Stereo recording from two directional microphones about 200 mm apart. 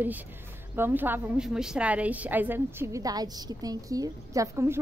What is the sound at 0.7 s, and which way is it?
A woman's voice, 10° right (ahead or behind).